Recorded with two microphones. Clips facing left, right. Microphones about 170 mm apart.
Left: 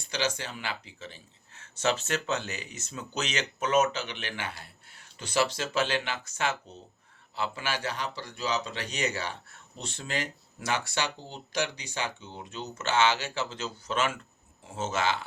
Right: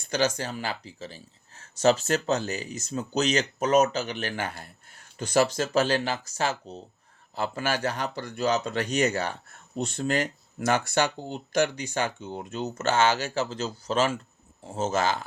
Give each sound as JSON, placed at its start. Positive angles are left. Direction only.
{"t": 0.0, "sound": "speech", "side_deg": -45}